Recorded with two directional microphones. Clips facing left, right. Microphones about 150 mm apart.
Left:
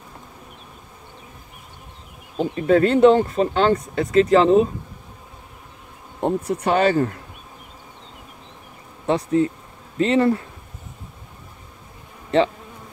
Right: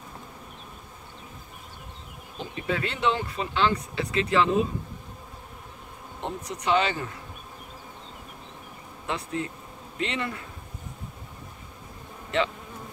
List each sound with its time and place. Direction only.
2.3 s speech: 45° left (ahead or behind)
6.2 s speech: 55° left (ahead or behind)
9.0 s speech: 35° left (ahead or behind)